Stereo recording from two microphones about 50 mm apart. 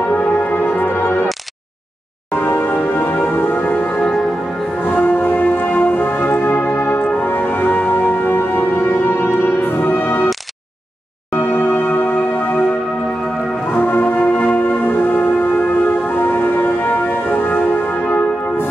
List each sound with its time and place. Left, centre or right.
0.1 s music: left
2.3 s music: left
4.0 s music: centre
4.8 s music: left
11.3 s music: left
13.7 s music: left